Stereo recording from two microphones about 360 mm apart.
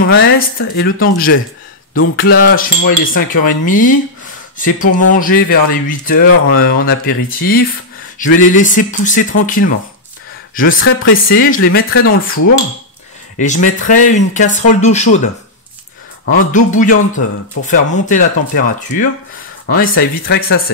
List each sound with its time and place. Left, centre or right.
0.0 s speech: left
10.5 s speech: left
13.4 s speech: left
16.3 s speech: left